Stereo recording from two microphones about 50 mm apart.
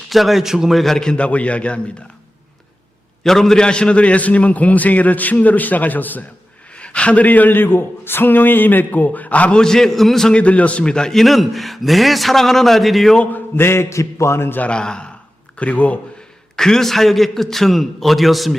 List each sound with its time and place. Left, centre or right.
0.1 s a man's voice: centre
1.1 s a man's voice: left
3.2 s a man's voice: centre
3.6 s a man's voice: left
6.7 s a man's voice: left
9.6 s a man's voice: centre
10.2 s a man's voice: left
11.1 s a man's voice: centre
13.6 s a man's voice: left
14.6 s a man's voice: centre
16.6 s a man's voice: centre